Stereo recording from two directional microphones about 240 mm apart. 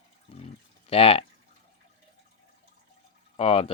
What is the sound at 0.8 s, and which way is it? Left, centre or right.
Speech, left.